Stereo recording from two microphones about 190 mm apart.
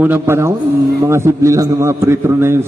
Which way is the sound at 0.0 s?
10° right (ahead or behind).